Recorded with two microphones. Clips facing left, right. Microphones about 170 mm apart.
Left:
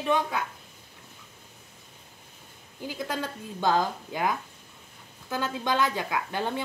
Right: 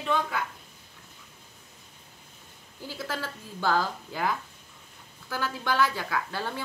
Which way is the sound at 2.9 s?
20° left (ahead or behind).